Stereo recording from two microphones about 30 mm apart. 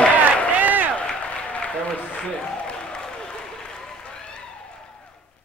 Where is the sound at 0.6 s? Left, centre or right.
Right.